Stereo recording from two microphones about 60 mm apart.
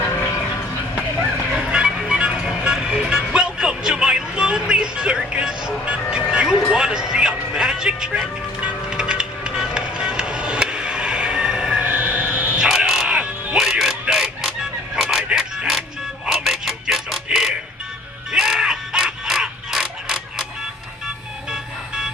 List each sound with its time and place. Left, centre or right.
1.5 s vehicle: centre
6.7 s music: centre
11.9 s a sound: right
12.5 s music: centre
13.6 s music: centre
18.3 s mechanisms: centre
21.5 s vehicle: centre